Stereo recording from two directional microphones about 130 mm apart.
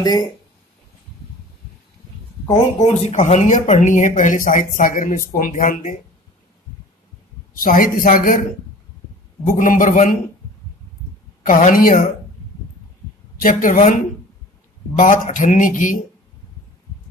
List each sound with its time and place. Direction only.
0.0 s speech: 35° left (ahead or behind)
2.5 s speech: 55° left (ahead or behind); by 5.9 s 90° left
7.5 s speech: 90° left
9.5 s speech: 90° left
11.4 s speech: 90° left
13.4 s speech: 90° left
15.0 s speech: 85° left